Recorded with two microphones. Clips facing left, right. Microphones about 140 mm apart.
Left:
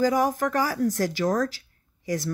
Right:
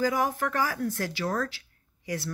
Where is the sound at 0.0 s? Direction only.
40° left (ahead or behind).